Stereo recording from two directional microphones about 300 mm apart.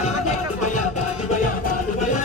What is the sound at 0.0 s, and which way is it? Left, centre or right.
Music, left.